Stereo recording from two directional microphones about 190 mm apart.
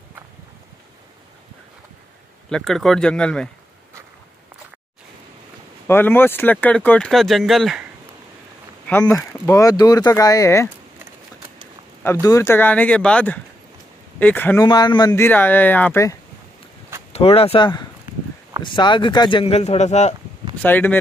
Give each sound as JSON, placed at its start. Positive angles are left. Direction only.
{"t": 2.5, "sound": "speech", "side_deg": 0}
{"t": 5.9, "sound": "speech", "side_deg": 10}
{"t": 9.0, "sound": "speech", "side_deg": 15}
{"t": 12.0, "sound": "speech", "side_deg": 15}
{"t": 14.7, "sound": "speech", "side_deg": 20}
{"t": 17.1, "sound": "speech", "side_deg": 30}
{"t": 20.6, "sound": "speech", "side_deg": 10}